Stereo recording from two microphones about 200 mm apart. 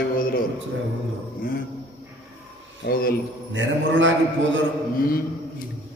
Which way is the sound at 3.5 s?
70° right (ahead or behind).